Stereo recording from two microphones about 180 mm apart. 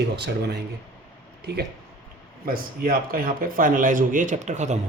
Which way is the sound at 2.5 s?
55° right (ahead or behind).